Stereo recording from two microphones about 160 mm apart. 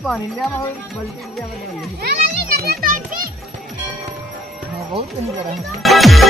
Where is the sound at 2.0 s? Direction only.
80° right.